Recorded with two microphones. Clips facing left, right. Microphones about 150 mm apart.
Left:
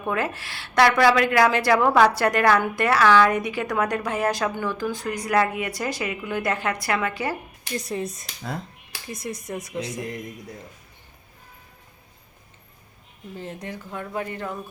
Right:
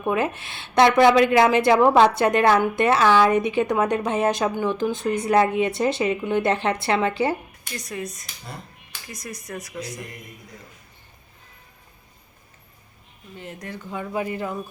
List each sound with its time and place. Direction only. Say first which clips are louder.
0.0 s a woman's voice: right 3 dB; 20° right (ahead or behind)
7.8 s speech: left 3 dB; 30° left (ahead or behind)
13.4 s speech: left 2 dB; 30° left (ahead or behind)
13.8 s speech: right 4 dB; 5° right (ahead or behind)